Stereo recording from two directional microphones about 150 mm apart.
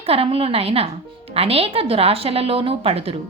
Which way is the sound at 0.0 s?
40° right (ahead or behind).